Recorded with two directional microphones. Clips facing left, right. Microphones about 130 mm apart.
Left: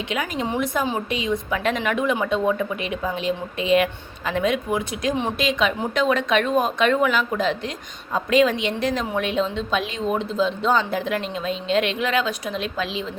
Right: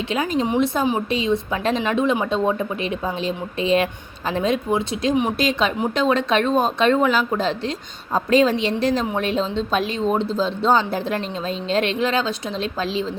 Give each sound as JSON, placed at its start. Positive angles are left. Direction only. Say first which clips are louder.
{"t": 0.1, "sound": "a woman's voice", "louder": "right 5 dB", "side_deg": -30}